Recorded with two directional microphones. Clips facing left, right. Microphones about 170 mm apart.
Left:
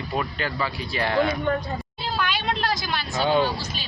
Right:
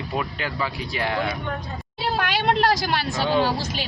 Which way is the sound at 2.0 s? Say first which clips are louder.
Right 5 dB; 65° right (ahead or behind).